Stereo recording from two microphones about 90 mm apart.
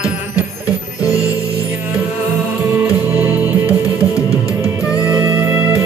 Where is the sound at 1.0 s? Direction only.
40° left (ahead or behind).